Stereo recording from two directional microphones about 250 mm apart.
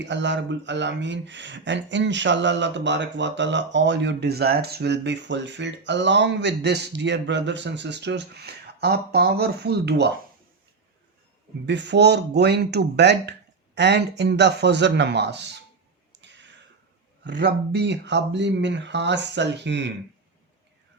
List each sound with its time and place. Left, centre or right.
0.0 s speech: right
11.6 s speech: right
16.2 s clicking: right
17.2 s speech: right